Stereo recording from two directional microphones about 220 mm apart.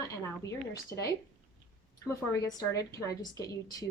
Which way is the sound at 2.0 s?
15° left (ahead or behind).